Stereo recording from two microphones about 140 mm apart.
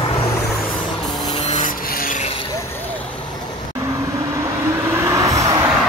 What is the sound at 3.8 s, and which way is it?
Vehicle, 20° right (ahead or behind).